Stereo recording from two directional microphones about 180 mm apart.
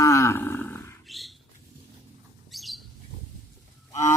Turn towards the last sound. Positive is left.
turn(degrees=15)  # may be behind; listen again after turning